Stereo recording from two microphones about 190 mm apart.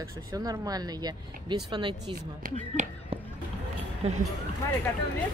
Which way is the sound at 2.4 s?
40° right (ahead or behind).